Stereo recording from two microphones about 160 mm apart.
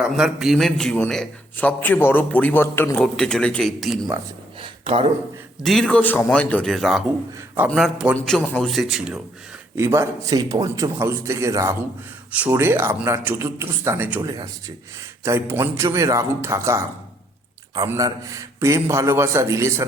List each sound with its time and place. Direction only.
0.0 s a man's voice: 5° right (ahead or behind)
4.6 s a sound: 35° right (ahead or behind)
5.6 s a man's voice: 5° left (ahead or behind)
9.7 s a man's voice: 15° right (ahead or behind)